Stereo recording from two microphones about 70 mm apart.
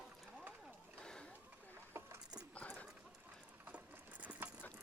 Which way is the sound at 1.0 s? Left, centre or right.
Centre.